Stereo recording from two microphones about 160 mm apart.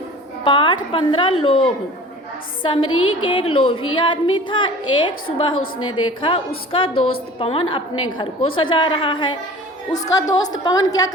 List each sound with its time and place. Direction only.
0.4 s a woman's voice: 30° left (ahead or behind)